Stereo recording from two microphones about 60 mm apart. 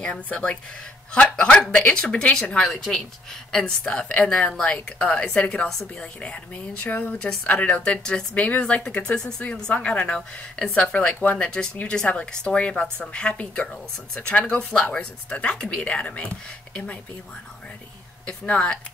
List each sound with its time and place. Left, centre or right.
0.0 s speech: centre
1.7 s speech: centre
5.7 s speech: centre
6.2 s speech: left
10.8 s speech: centre
18.2 s speech: centre